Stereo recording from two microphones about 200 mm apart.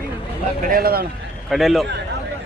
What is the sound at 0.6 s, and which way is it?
Speech, 45° right (ahead or behind).